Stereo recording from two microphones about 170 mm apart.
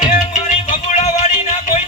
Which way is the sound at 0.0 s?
45° left (ahead or behind).